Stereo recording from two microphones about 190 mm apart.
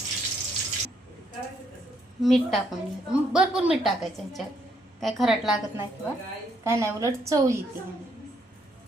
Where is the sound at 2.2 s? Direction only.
Centre (ahead or behind).